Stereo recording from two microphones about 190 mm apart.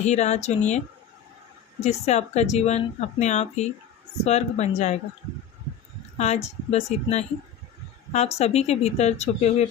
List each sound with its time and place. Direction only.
0.0 s speech: 35° left (ahead or behind)
1.8 s speech: 35° left (ahead or behind)
6.1 s speech: 35° left (ahead or behind)